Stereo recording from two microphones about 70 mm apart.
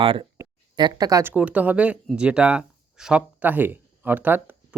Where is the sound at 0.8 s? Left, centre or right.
Right.